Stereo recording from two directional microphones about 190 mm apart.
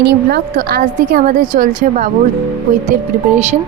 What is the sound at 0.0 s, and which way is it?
A woman's voice, 60° right (ahead or behind).